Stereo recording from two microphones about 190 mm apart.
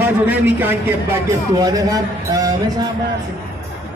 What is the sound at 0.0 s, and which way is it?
A man's voice, 10° right (ahead or behind).